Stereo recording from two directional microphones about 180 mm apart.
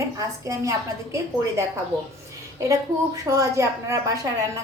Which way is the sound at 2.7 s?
20° right (ahead or behind).